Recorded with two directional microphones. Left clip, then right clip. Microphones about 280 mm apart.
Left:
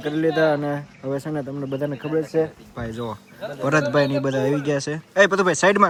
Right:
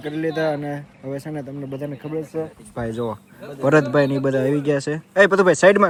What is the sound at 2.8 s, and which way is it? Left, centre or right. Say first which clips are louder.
Speech: right 5 dB; centre.